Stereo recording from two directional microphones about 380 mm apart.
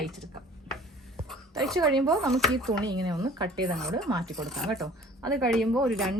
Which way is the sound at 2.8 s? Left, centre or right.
Centre.